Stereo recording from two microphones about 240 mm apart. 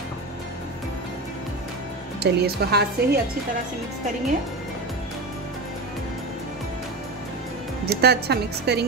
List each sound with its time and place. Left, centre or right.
2.2 s a woman's voice: right
7.8 s speech: right